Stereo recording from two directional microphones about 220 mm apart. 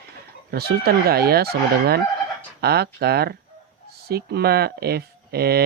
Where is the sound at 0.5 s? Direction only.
45° right (ahead or behind).